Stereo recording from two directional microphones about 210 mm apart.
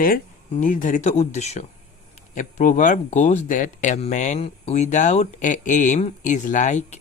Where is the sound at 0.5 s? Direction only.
40° left (ahead or behind).